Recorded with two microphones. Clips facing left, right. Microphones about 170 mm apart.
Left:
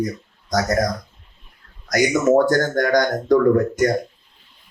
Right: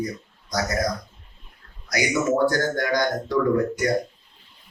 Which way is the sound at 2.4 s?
45° left (ahead or behind).